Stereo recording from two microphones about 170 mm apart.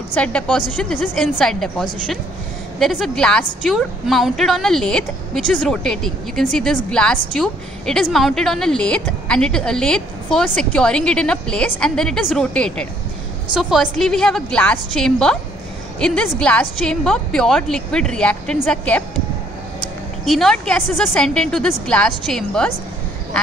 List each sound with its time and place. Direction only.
0.1 s a woman's voice: 5° left (ahead or behind)
20.2 s a woman's voice: centre (ahead or behind)